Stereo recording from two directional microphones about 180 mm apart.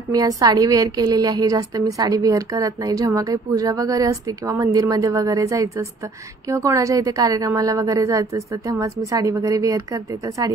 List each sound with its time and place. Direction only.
0.1 s a woman's voice: 20° right (ahead or behind)